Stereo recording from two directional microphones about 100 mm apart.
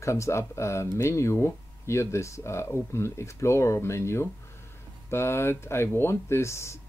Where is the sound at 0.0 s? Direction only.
30° left (ahead or behind).